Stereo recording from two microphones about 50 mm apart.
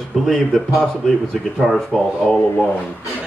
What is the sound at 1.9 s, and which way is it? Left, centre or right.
Speech, centre.